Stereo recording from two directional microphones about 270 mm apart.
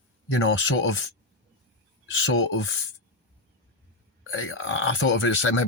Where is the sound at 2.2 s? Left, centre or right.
Left.